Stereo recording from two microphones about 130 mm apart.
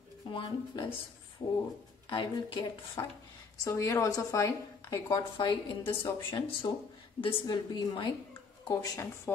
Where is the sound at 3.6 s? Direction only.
25° left (ahead or behind).